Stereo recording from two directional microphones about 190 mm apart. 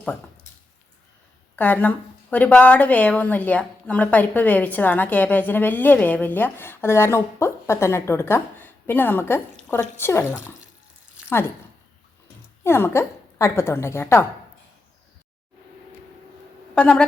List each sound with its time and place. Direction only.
1.5 s a woman's voice: 10° left (ahead or behind)
12.6 s a woman's voice: 15° left (ahead or behind)
16.7 s a woman's voice: 5° left (ahead or behind)